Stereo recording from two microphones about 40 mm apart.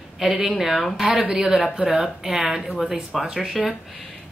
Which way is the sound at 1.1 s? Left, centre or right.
Right.